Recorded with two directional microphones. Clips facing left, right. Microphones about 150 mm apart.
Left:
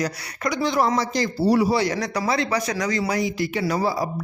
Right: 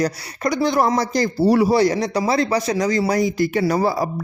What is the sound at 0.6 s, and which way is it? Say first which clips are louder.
Speech: right 2 dB; 45° right (ahead or behind).